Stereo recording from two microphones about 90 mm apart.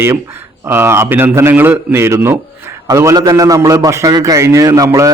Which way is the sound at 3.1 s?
45° right (ahead or behind).